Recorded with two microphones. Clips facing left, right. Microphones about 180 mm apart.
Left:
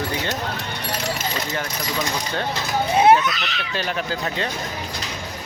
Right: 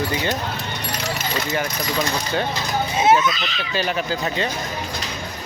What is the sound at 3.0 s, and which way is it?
Speech, 65° left (ahead or behind).